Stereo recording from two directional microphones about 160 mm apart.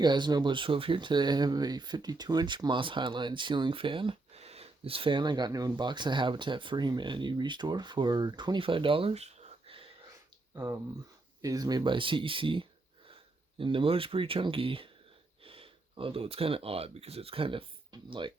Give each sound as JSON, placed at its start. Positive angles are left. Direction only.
{"t": 0.0, "sound": "speech", "side_deg": -25}
{"t": 10.5, "sound": "speech", "side_deg": -20}